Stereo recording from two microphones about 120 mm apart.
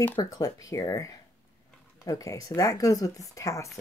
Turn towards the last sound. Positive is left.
turn(degrees=25)  # may be behind; listen again after turning